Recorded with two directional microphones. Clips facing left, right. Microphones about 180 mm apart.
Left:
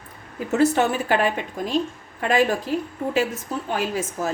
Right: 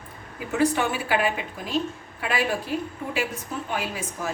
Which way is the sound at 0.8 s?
40° left (ahead or behind).